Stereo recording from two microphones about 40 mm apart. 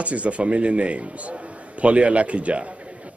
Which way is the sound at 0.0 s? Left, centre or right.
Right.